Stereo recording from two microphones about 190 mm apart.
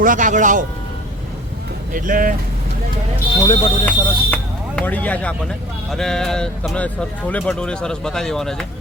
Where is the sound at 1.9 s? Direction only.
45° right (ahead or behind).